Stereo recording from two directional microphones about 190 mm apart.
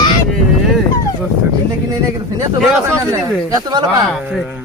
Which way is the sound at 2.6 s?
Centre (ahead or behind).